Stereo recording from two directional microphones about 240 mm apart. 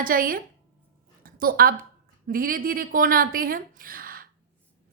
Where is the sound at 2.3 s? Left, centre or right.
Right.